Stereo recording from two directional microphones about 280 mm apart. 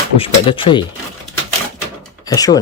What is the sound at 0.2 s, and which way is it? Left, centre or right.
Speech, centre.